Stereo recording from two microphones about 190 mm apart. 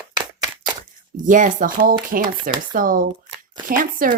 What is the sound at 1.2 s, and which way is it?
Speech, 45° right (ahead or behind).